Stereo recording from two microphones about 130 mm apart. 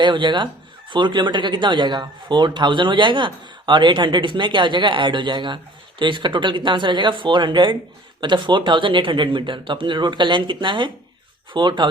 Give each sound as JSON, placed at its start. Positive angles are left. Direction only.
{"t": 0.0, "sound": "speech", "side_deg": -35}